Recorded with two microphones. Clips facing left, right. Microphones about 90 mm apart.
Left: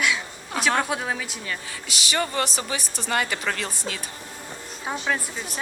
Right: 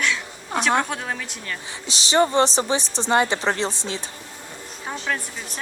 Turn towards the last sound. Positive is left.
turn(degrees=5)  # may be behind; listen again after turning